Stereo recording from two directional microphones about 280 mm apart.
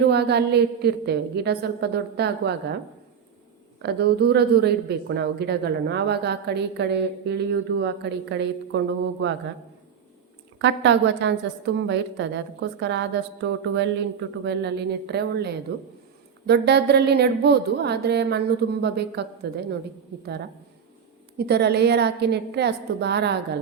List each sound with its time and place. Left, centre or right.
0.1 s speech: right
3.8 s speech: right
10.6 s speech: right
21.3 s speech: right